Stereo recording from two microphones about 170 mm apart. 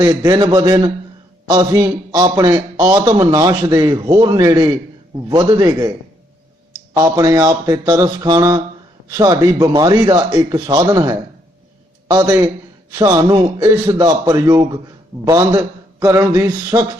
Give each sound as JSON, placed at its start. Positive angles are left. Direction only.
{"t": 0.0, "sound": "a man's voice", "side_deg": -20}
{"t": 6.9, "sound": "a man's voice", "side_deg": -20}